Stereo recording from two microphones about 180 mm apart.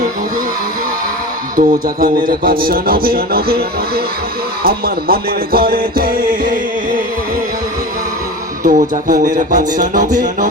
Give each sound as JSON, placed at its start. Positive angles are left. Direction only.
{"t": 1.5, "sound": "a man's voice", "side_deg": -50}
{"t": 8.6, "sound": "music", "side_deg": -50}